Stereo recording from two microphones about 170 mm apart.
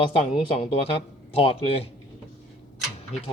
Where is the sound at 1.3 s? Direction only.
35° left (ahead or behind).